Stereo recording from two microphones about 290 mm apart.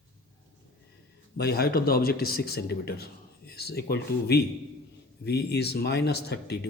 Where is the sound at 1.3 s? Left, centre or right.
Left.